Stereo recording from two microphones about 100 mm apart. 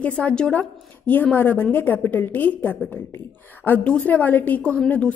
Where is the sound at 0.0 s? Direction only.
10° left (ahead or behind).